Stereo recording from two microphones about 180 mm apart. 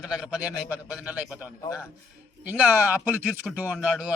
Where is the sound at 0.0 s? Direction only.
5° right (ahead or behind).